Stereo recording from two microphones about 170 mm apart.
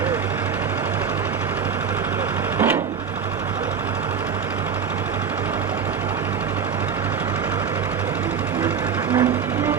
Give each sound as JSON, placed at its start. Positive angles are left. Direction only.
{"t": 9.1, "sound": "music", "side_deg": -20}